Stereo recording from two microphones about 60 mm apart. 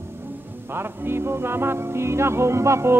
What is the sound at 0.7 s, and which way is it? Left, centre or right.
Music, right.